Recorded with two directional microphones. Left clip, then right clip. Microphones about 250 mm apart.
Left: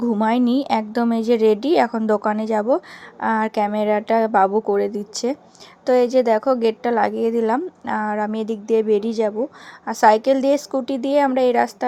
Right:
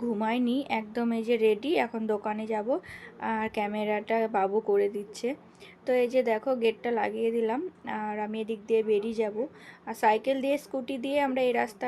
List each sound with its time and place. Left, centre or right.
0.1 s a woman's voice: left